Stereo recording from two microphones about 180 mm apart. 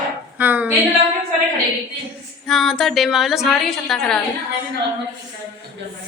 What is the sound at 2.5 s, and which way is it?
A woman's voice, centre (ahead or behind).